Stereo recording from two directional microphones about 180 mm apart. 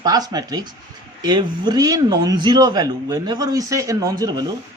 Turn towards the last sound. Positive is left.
turn(degrees=-20)  # may be behind; listen again after turning